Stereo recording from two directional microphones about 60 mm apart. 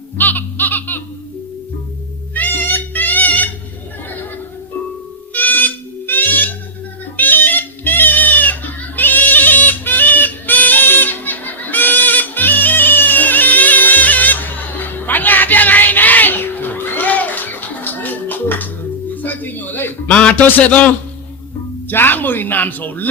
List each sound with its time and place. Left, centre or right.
0.2 s music: left
2.3 s cat: left
5.3 s music: left
7.2 s goat: left
19.1 s music: left
20.1 s a sound: centre
20.5 s speech: left